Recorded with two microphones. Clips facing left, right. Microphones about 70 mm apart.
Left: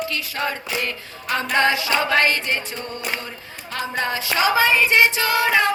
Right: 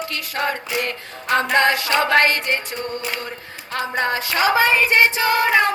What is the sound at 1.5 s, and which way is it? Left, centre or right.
Music, right.